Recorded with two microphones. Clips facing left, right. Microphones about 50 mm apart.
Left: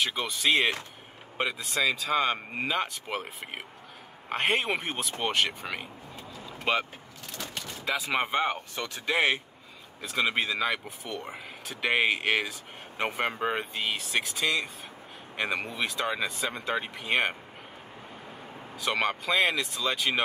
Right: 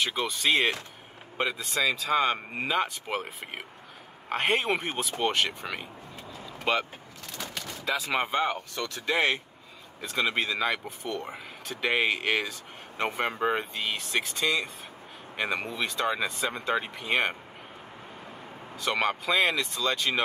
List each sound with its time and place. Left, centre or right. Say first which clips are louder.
0.0 s speech: even; centre; by 9.0 s left
9.0 s speech: even; centre
18.8 s speech: right 1 dB; centre